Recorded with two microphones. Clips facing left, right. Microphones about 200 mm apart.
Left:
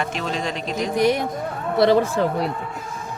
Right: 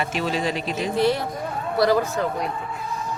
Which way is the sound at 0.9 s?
20° left (ahead or behind).